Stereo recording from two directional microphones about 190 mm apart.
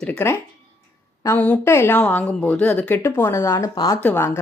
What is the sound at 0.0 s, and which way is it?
A woman's voice, 10° left (ahead or behind).